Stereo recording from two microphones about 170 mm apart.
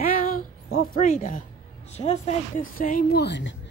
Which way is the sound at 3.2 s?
90° left.